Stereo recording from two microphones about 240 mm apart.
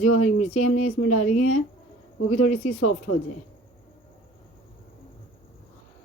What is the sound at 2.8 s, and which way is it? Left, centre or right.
Speech, left.